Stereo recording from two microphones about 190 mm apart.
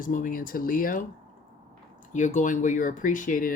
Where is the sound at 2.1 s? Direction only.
40° left (ahead or behind).